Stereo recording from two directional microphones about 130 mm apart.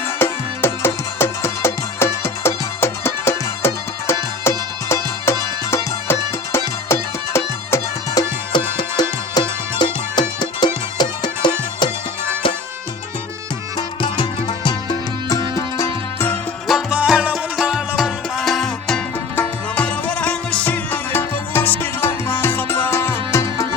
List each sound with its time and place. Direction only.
0.2 s music: 20° left (ahead or behind)
8.7 s music: 30° left (ahead or behind)
13.7 s music: 40° left (ahead or behind)
15.5 s music: 20° left (ahead or behind)
16.6 s music: 5° right (ahead or behind); by 23.6 s 20° left (ahead or behind)